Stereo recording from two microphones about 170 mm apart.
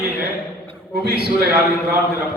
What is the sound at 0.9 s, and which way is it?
Speech, 70° right (ahead or behind).